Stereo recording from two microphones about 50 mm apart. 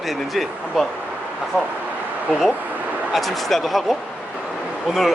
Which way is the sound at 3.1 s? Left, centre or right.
Centre.